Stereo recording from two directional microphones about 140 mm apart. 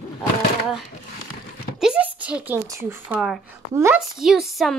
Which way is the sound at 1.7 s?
5° right (ahead or behind).